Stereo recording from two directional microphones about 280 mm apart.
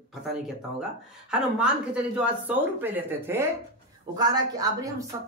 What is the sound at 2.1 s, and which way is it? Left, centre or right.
Speech, centre.